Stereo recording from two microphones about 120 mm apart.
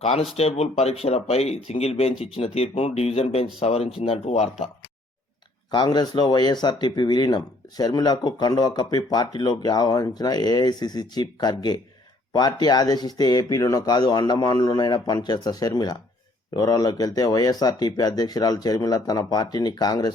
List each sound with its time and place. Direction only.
0.3 s speech: 60° left (ahead or behind)
5.7 s speech: 35° left (ahead or behind)